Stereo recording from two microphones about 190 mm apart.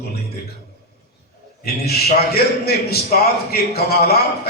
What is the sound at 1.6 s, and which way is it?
A man's voice, 55° left (ahead or behind).